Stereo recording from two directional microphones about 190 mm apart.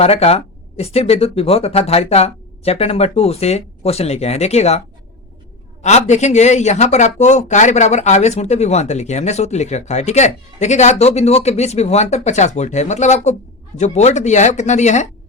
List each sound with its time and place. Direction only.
0.0 s speech: 35° left (ahead or behind)
5.8 s speech: 35° left (ahead or behind)